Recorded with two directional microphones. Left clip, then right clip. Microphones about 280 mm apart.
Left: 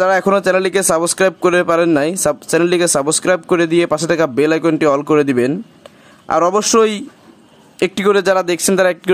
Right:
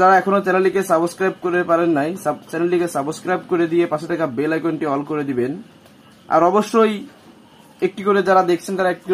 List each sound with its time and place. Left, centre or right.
0.0 s speech: left